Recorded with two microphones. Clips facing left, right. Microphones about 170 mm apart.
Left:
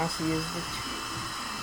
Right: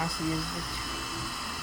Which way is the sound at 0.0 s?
Centre (ahead or behind).